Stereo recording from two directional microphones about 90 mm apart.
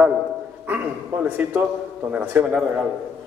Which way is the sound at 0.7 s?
20° right (ahead or behind).